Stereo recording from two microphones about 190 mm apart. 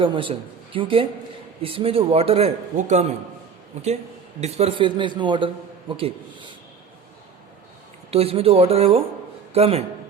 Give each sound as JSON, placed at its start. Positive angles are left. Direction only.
{"t": 0.0, "sound": "a man's voice", "side_deg": -25}
{"t": 8.1, "sound": "speech", "side_deg": -30}